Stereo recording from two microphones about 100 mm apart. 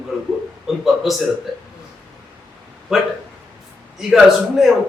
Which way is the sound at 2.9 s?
5° right (ahead or behind).